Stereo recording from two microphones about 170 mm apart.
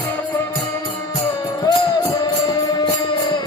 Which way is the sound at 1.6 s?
20° left (ahead or behind).